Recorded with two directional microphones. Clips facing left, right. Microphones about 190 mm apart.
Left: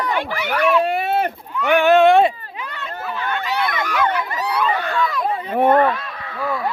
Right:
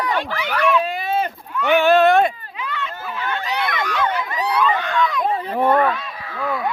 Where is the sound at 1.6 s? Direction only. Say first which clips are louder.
Even; 10° left (ahead or behind).